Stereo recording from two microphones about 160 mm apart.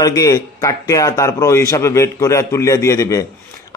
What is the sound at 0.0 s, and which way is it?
Speech, 20° left (ahead or behind).